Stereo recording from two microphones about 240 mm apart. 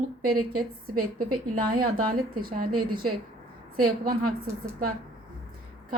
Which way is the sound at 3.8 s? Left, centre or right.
Right.